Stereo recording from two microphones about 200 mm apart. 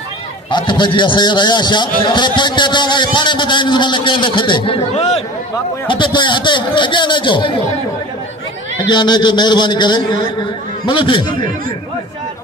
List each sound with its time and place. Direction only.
0.5 s a man's voice: 25° left (ahead or behind)
8.7 s a man's voice: 20° left (ahead or behind)